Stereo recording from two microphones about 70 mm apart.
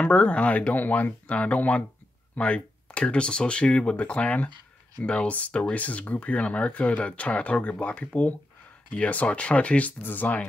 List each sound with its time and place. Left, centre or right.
0.0 s speech: centre